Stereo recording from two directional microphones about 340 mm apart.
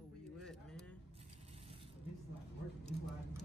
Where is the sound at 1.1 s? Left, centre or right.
Centre.